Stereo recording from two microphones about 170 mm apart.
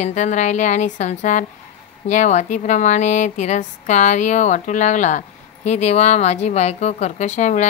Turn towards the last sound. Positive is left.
turn(degrees=45)  # may be behind; listen again after turning